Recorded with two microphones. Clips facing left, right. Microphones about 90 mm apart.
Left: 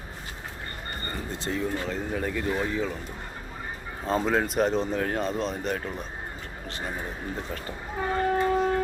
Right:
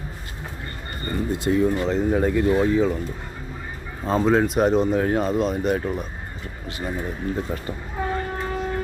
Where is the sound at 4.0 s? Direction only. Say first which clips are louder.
Right 6 dB; 5° right (ahead or behind).